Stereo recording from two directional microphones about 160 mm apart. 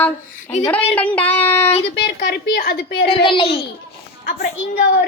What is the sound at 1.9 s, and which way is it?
A woman's voice, 90° left.